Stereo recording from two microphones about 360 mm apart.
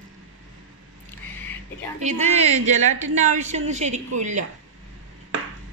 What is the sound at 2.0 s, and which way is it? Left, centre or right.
A woman's voice, centre.